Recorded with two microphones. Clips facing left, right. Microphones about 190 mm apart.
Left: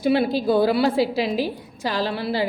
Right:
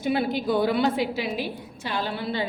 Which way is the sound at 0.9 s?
30° left (ahead or behind).